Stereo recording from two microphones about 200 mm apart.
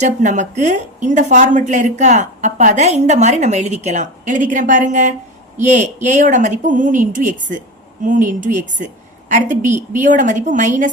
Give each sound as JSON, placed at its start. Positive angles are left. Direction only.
{"t": 0.0, "sound": "a woman's voice", "side_deg": -35}